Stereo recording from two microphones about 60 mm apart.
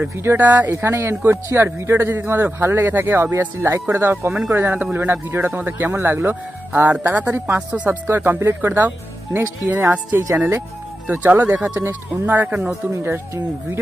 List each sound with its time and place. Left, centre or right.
0.4 s speech: right
0.7 s a man's voice: right
3.3 s a man's voice: right
7.5 s speech: right
8.1 s a man's voice: right
11.5 s speech: centre
11.9 s speech: right